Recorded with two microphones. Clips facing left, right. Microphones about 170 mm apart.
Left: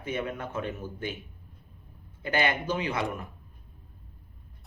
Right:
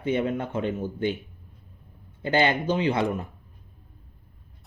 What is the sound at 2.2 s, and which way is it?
Speech, 30° right (ahead or behind).